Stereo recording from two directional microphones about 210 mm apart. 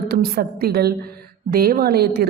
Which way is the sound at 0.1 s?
45° right (ahead or behind).